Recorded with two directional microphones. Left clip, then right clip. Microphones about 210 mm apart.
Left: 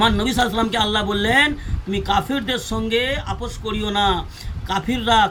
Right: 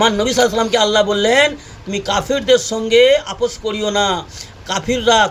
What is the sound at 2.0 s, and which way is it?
A man's voice, 15° left (ahead or behind).